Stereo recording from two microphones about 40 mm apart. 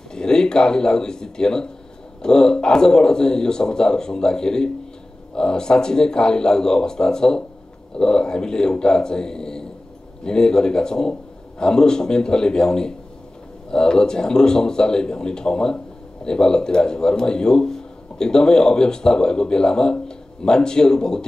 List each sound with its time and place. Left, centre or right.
0.1 s speech: centre